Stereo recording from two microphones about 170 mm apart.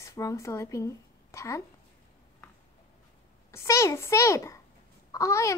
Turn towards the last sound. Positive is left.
turn(degrees=20)  # may be behind; listen again after turning